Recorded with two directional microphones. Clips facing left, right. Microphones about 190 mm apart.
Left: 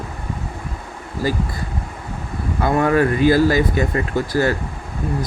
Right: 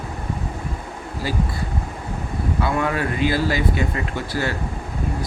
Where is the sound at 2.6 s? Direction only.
45° left (ahead or behind).